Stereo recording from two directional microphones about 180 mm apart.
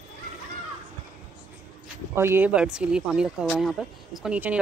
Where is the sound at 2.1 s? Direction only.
15° right (ahead or behind).